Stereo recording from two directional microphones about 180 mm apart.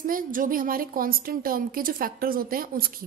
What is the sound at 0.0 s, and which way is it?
A woman's voice, 50° right (ahead or behind).